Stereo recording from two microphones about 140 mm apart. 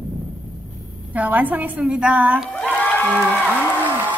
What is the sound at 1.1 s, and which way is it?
A woman's voice, 10° right (ahead or behind).